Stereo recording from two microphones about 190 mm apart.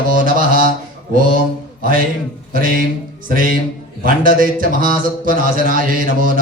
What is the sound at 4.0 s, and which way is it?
Speech, 45° right (ahead or behind).